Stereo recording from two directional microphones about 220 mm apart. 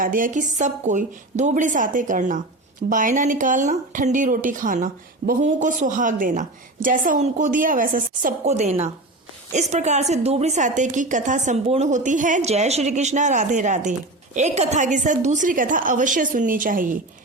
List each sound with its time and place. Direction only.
0.0 s a woman's voice: 40° right (ahead or behind)